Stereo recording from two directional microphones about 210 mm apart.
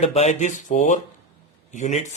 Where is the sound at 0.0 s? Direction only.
30° left (ahead or behind).